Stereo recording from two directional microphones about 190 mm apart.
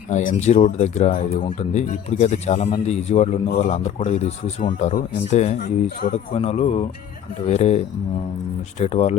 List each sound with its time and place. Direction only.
0.1 s speech: 40° left (ahead or behind)